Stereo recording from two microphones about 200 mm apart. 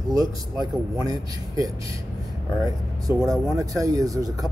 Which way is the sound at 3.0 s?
15° right (ahead or behind).